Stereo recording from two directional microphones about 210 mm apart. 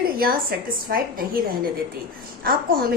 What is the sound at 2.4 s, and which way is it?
Speech, 45° right (ahead or behind).